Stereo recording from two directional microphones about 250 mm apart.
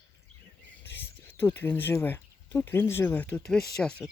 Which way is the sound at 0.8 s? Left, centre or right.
Centre.